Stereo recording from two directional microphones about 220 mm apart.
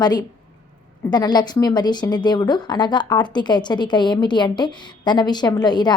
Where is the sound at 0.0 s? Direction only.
20° left (ahead or behind).